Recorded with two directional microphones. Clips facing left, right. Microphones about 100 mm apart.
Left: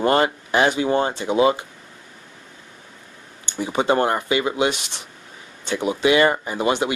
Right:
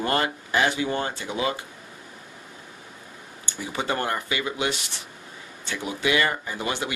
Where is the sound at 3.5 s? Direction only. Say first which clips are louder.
Left 8 dB; 20° left (ahead or behind).